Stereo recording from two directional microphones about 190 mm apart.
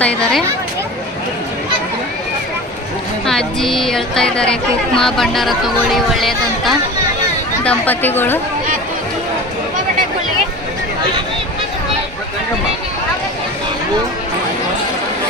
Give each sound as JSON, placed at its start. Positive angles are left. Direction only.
{"t": 0.0, "sound": "speech", "side_deg": 5}
{"t": 3.2, "sound": "speech", "side_deg": 0}